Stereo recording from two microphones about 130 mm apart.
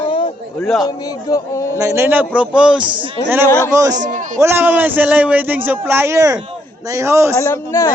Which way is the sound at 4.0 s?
75° right (ahead or behind).